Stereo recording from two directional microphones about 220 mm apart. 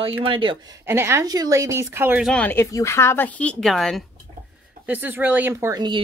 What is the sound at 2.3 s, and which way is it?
Speech, 10° left (ahead or behind).